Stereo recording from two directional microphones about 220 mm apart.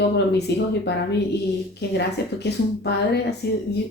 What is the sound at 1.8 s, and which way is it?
A woman's voice, 50° left (ahead or behind).